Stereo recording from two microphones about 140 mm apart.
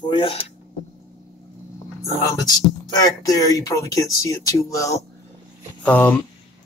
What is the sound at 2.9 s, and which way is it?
Speech, 25° left (ahead or behind).